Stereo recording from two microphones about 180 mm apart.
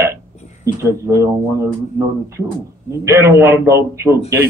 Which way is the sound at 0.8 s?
15° right (ahead or behind).